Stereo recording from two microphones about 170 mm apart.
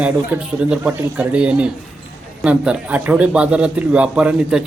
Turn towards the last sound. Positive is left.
turn(degrees=-5)  # may be behind; listen again after turning